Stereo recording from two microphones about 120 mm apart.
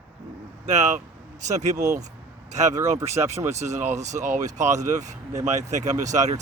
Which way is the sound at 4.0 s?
85° right.